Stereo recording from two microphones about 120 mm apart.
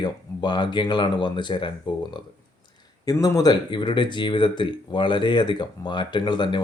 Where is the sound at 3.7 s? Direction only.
40° left (ahead or behind).